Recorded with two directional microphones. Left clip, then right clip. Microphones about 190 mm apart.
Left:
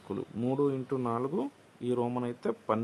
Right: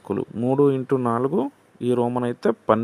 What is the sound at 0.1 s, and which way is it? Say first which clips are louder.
Speech: right 10 dB; 30° right (ahead or behind).